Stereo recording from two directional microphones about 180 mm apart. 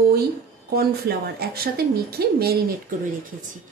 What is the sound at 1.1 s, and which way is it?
Speech, 60° right (ahead or behind).